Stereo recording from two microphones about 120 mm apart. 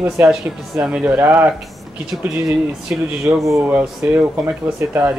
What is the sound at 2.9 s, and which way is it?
Speech, 15° right (ahead or behind).